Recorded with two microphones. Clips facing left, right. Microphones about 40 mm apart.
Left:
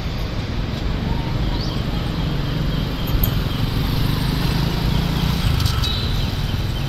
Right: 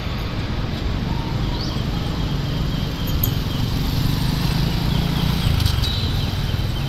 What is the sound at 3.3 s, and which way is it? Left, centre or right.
Vehicle, centre.